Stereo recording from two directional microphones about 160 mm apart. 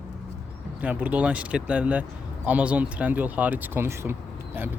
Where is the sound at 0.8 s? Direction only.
10° right (ahead or behind).